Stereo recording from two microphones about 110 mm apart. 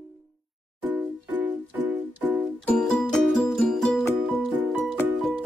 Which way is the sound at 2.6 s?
5° left (ahead or behind).